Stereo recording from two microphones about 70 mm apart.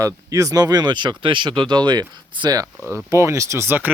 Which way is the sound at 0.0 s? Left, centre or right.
Right.